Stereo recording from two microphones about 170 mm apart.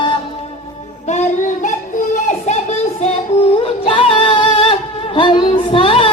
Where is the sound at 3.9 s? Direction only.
30° left (ahead or behind).